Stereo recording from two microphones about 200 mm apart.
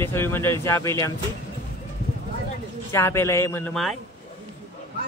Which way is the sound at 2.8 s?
15° left (ahead or behind).